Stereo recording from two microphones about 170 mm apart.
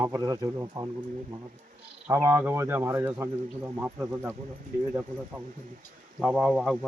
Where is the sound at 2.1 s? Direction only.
15° right (ahead or behind).